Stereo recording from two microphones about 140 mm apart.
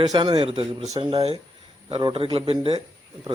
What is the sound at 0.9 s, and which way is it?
A man's voice, 35° right (ahead or behind).